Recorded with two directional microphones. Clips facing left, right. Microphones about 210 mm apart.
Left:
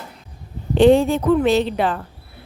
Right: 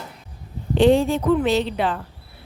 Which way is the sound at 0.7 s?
55° left (ahead or behind).